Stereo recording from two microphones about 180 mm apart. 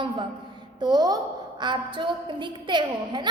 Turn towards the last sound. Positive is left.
turn(degrees=-25)  # may be behind; listen again after turning